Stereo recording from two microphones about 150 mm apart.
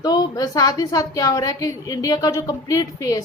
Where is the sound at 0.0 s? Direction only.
25° left (ahead or behind).